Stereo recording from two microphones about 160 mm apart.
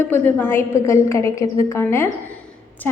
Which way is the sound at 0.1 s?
10° left (ahead or behind).